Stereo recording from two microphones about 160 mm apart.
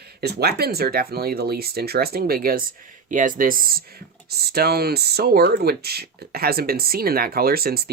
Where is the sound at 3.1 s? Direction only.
55° right (ahead or behind).